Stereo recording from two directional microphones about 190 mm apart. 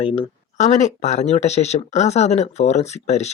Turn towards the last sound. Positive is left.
turn(degrees=35)  # may be behind; listen again after turning